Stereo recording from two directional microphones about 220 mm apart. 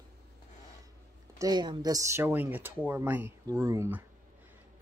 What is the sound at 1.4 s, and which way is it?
Speech, 20° right (ahead or behind).